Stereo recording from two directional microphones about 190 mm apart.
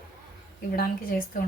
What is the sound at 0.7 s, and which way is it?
Speech, 50° left (ahead or behind).